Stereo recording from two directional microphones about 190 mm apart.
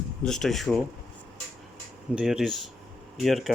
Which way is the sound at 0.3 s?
Centre (ahead or behind).